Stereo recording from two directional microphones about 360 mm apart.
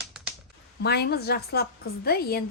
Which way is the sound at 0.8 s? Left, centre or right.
Left.